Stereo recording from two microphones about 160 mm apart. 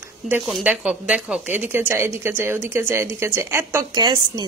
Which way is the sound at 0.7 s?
5° right (ahead or behind).